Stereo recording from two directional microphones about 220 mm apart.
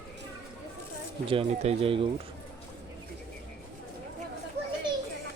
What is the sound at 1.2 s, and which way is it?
Speech, 25° right (ahead or behind).